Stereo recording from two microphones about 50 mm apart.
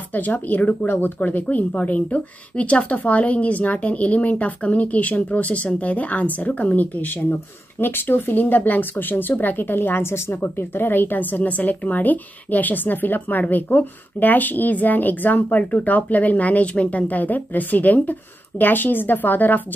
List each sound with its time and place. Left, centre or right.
0.1 s a woman's voice: left
7.8 s speech: left
10.4 s speech: left